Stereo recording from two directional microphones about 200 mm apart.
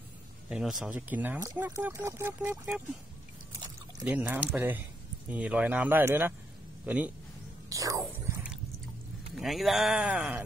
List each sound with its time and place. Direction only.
0.5 s speech: centre (ahead or behind)
4.0 s speech: 10° right (ahead or behind)
7.7 s a sound: 15° right (ahead or behind)
8.0 s biting: centre (ahead or behind)
9.4 s speech: centre (ahead or behind)